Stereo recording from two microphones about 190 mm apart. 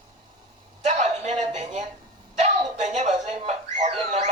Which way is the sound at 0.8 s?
35° right (ahead or behind).